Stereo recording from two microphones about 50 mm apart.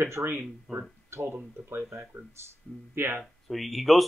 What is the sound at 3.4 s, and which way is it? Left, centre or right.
Speech, centre.